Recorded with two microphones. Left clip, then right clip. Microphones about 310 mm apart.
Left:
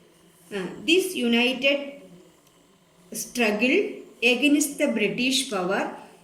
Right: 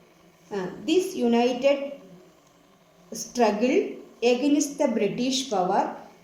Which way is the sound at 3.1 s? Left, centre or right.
Centre.